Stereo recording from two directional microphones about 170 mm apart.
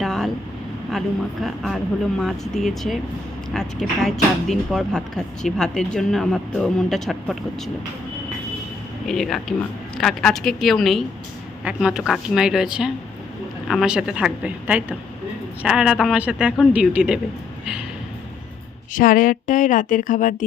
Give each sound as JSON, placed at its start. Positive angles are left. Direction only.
{"t": 0.0, "sound": "vehicle", "side_deg": 0}
{"t": 0.9, "sound": "speech", "side_deg": 0}
{"t": 9.0, "sound": "speech", "side_deg": 0}
{"t": 18.9, "sound": "speech", "side_deg": 50}